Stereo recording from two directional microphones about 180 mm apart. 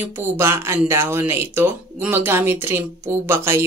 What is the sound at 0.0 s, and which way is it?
Speech, 10° right (ahead or behind).